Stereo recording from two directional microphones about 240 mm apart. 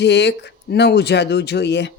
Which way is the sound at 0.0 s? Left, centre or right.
Left.